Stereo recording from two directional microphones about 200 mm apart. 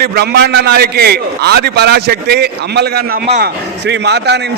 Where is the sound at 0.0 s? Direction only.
55° right (ahead or behind).